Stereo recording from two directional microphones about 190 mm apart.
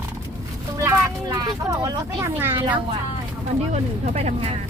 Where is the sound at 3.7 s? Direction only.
35° right (ahead or behind).